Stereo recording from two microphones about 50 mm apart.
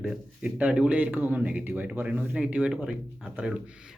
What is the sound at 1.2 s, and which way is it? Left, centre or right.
Speech, right.